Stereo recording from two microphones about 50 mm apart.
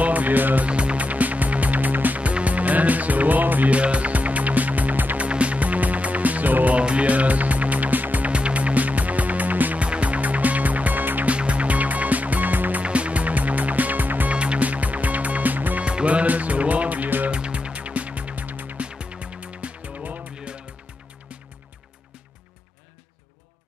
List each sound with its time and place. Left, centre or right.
0.0 s music: right
0.7 s music: right
6.8 s music: right
8.3 s music: right
11.3 s music: right
12.8 s music: right
14.3 s music: right
15.8 s music: right
17.3 s music: right
18.9 s music: right